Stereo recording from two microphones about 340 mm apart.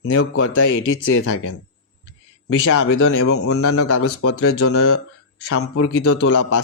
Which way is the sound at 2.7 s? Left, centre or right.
Left.